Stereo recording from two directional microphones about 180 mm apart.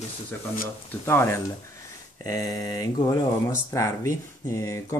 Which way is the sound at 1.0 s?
15° left (ahead or behind).